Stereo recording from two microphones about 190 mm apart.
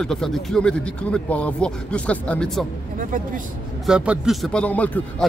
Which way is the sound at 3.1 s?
45° right (ahead or behind).